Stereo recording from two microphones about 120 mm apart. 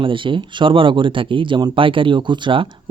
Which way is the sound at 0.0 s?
45° right (ahead or behind).